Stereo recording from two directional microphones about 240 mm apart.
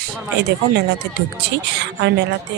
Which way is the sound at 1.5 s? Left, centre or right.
Right.